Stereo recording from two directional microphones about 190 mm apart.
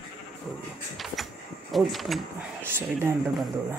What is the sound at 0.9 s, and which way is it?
Vehicle, centre (ahead or behind).